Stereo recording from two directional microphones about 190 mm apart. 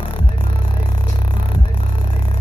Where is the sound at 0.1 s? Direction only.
25° left (ahead or behind).